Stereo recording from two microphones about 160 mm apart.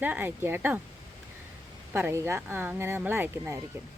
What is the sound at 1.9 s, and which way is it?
Speech, 15° right (ahead or behind).